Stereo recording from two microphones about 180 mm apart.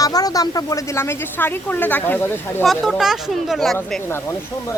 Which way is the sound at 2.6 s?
Centre (ahead or behind).